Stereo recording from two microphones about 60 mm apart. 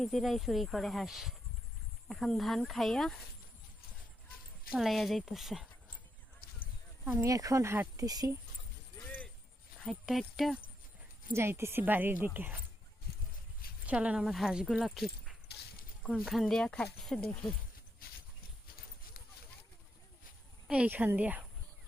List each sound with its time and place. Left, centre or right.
0.0 s speech: centre
4.8 s speech: centre
7.0 s speech: right
7.3 s speech: right
7.9 s speech: right
10.1 s speech: centre
11.3 s a woman's voice: right
11.8 s speech: right
13.8 s speech: centre
14.3 s speech: centre
14.8 s speech: centre
16.6 s speech: centre
20.7 s a woman's voice: centre
20.9 s speech: right